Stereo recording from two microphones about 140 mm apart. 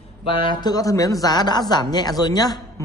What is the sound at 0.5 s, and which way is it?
A man's voice, 30° left (ahead or behind).